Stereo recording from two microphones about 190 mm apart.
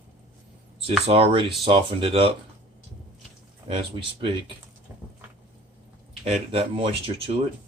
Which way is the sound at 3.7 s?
25° right (ahead or behind).